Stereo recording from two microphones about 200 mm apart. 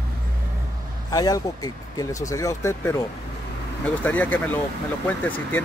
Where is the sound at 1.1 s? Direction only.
20° left (ahead or behind).